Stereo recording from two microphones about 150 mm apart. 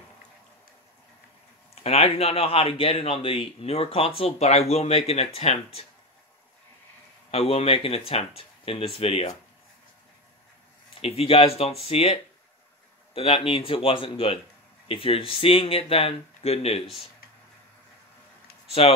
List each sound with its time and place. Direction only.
1.8 s speech: 45° left (ahead or behind)
7.2 s speech: 40° left (ahead or behind)
11.0 s speech: 40° left (ahead or behind)